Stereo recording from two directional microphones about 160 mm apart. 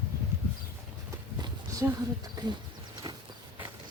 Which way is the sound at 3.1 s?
25° right (ahead or behind).